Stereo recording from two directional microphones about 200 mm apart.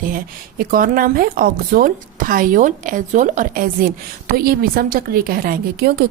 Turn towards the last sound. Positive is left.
turn(degrees=-50)  # may be behind; listen again after turning